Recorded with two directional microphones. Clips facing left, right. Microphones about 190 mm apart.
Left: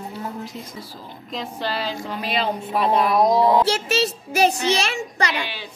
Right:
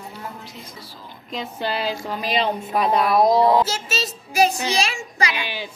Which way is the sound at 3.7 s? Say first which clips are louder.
Left 6 dB; 65° left (ahead or behind).